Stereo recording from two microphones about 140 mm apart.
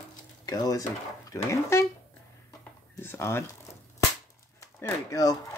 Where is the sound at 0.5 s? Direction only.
25° left (ahead or behind).